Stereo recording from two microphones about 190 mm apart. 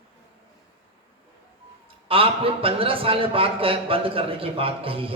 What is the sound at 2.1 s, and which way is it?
A man's voice, 30° right (ahead or behind).